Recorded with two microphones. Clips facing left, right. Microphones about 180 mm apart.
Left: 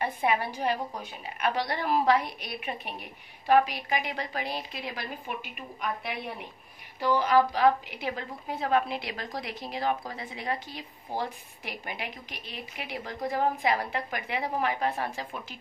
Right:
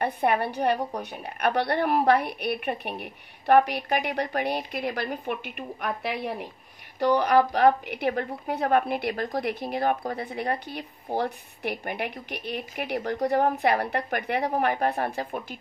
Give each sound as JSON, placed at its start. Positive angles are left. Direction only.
{"t": 0.0, "sound": "a woman's voice", "side_deg": -60}